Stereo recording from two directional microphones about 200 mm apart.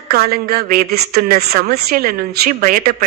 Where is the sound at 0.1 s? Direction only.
50° right (ahead or behind).